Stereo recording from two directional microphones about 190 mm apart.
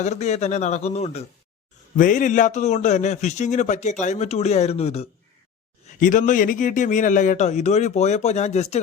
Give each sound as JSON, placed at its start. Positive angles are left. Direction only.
{"t": 0.0, "sound": "a man's voice", "side_deg": 35}
{"t": 6.0, "sound": "a man's voice", "side_deg": 45}